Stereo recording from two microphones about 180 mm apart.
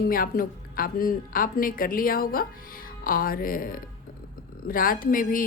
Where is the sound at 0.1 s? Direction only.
55° left (ahead or behind).